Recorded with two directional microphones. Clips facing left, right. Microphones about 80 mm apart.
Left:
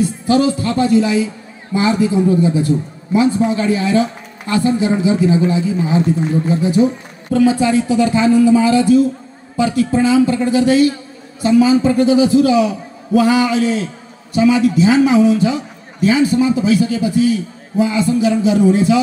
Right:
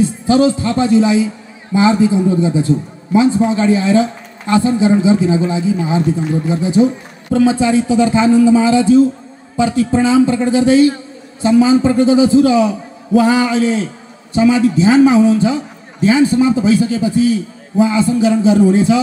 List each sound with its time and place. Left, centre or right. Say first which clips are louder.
0.3 s a man's voice: right 2 dB; right
7.3 s a man's voice: right 1 dB; right